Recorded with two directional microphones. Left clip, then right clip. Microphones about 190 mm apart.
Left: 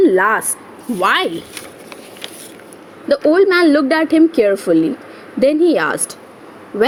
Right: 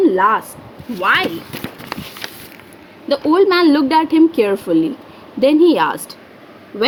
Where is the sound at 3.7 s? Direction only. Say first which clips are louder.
Even; 10° right (ahead or behind).